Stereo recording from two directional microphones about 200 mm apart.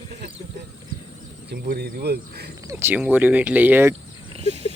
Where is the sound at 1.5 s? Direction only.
50° right (ahead or behind).